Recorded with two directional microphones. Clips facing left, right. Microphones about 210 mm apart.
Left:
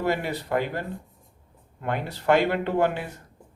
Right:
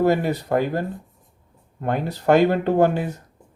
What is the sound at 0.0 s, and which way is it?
Speech, 45° right (ahead or behind).